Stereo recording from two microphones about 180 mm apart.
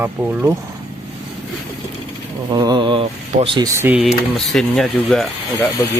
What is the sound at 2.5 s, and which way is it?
Speech, 25° right (ahead or behind).